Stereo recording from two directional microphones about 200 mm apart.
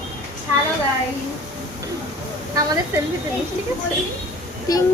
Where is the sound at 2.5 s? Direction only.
15° right (ahead or behind).